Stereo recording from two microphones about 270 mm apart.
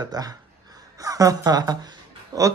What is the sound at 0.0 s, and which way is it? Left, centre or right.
A man's voice, centre.